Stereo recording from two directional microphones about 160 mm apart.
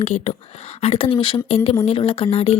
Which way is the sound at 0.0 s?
40° left (ahead or behind).